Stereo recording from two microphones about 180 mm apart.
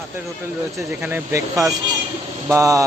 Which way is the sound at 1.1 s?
15° right (ahead or behind).